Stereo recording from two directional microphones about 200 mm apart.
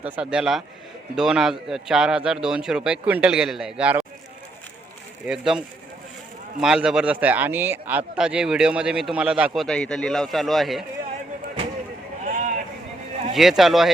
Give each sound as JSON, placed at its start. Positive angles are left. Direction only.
{"t": 0.2, "sound": "a man's voice", "side_deg": -5}
{"t": 5.2, "sound": "a man's voice", "side_deg": -5}
{"t": 12.2, "sound": "a sound", "side_deg": -40}
{"t": 13.3, "sound": "a man's voice", "side_deg": 0}